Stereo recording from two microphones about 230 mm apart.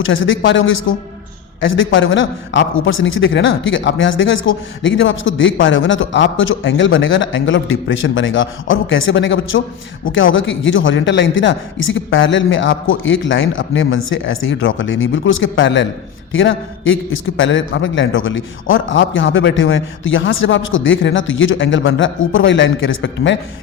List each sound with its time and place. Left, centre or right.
0.0 s a man's voice: left